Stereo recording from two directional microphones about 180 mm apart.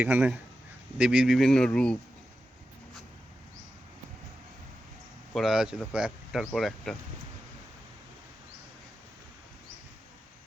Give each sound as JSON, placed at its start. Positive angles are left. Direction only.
{"t": 0.0, "sound": "speech", "side_deg": -10}
{"t": 5.3, "sound": "speech", "side_deg": 0}